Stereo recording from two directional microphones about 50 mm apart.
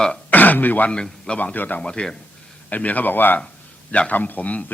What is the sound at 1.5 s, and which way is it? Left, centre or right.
Speech, left.